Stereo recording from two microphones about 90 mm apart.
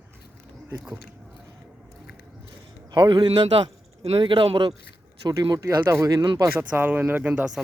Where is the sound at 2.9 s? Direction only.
60° right (ahead or behind).